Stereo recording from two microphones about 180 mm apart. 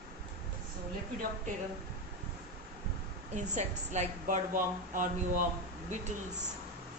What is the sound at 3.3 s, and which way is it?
A woman's voice, 40° right (ahead or behind).